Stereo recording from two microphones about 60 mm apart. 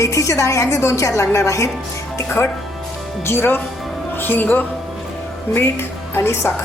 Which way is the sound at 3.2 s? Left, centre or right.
Left.